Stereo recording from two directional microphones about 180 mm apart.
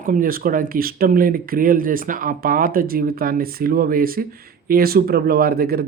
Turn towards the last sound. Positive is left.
turn(degrees=-55)  # may be behind; listen again after turning